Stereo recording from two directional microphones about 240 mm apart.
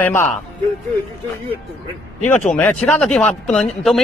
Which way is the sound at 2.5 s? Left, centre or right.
Centre.